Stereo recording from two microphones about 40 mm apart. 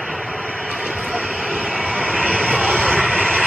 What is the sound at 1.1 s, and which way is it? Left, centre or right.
Vehicle, centre.